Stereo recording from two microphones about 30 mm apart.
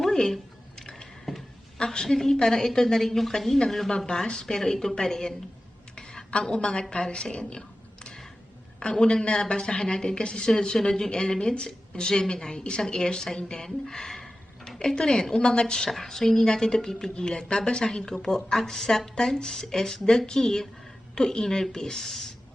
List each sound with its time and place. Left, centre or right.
0.0 s a sound: centre
1.8 s a woman's voice: left
3.9 s a woman's voice: left
4.3 s speech: left
6.0 s a sound: left
6.5 s a woman's voice: left
8.8 s speech: left; by 13.9 s centre
13.9 s a sound: left
14.8 s a woman's voice: left
21.9 s a woman's voice: centre